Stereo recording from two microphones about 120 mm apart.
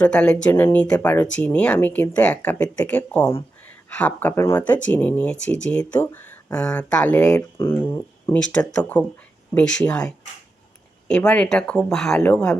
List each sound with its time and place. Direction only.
0.0 s speech: 10° left (ahead or behind)